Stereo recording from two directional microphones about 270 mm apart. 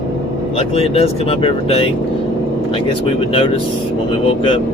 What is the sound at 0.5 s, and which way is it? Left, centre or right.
Speech, left.